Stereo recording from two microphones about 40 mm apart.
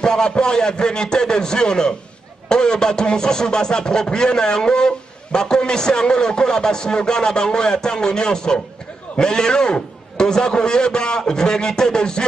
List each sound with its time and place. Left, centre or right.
0.0 s speech: centre